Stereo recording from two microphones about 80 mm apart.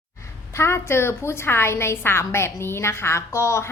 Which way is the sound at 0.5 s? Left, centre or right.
Left.